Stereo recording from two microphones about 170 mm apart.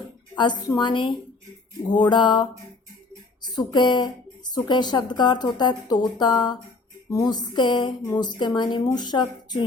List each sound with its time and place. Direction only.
0.3 s speech: 25° left (ahead or behind)